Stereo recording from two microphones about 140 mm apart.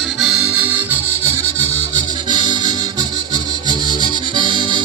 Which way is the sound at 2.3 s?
35° right (ahead or behind).